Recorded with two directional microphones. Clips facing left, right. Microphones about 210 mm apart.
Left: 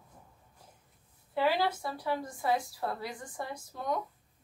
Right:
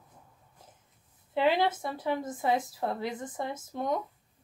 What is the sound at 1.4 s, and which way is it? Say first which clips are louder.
A woman's voice: right 3 dB; 20° right (ahead or behind).